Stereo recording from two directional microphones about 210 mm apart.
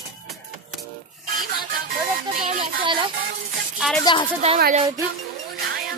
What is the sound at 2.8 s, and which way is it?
Speech, 25° right (ahead or behind).